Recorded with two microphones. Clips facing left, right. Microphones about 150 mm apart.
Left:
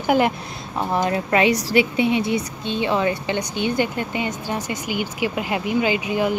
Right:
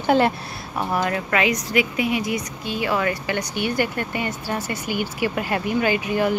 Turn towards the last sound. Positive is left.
turn(degrees=15)  # may be behind; listen again after turning